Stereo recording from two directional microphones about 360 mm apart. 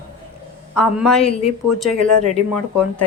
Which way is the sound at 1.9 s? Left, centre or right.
Left.